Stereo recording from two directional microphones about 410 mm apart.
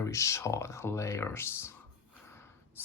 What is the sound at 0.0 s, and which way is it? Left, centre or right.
Speech, centre.